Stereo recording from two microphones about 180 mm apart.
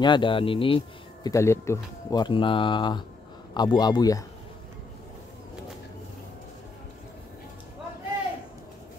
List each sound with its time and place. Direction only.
0.0 s speech: 25° left (ahead or behind)
1.3 s speech: 15° left (ahead or behind)